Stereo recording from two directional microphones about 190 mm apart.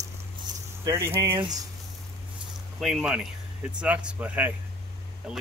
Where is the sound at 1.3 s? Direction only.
25° right (ahead or behind).